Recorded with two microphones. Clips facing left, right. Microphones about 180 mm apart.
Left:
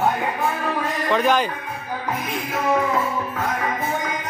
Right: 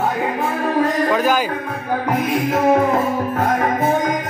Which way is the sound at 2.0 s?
50° right (ahead or behind).